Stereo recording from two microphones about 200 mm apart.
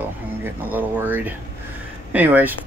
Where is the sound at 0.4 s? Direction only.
10° right (ahead or behind).